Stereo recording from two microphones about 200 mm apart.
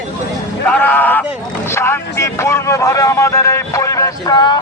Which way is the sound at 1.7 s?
15° left (ahead or behind).